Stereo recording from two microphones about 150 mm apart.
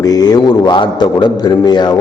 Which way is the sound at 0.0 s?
25° left (ahead or behind).